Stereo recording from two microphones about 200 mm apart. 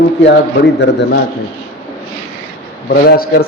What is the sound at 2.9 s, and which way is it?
Speech, 50° left (ahead or behind).